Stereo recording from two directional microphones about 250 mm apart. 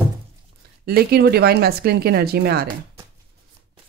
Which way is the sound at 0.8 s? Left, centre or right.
Right.